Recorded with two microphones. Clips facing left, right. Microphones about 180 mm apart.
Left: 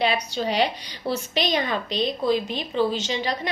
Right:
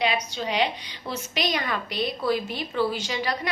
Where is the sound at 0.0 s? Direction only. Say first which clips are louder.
Left 3 dB; 35° left (ahead or behind).